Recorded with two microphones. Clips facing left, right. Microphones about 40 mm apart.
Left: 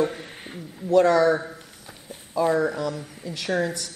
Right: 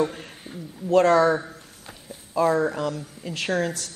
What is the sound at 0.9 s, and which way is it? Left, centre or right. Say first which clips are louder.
Speech: even; right.